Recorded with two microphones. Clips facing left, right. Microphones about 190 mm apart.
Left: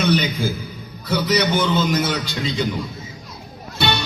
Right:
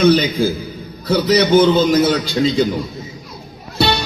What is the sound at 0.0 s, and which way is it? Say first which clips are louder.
A man's voice: right 7 dB; 35° right (ahead or behind).